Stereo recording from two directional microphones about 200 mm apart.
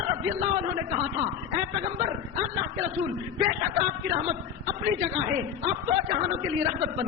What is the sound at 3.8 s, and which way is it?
A man's voice, 25° right (ahead or behind).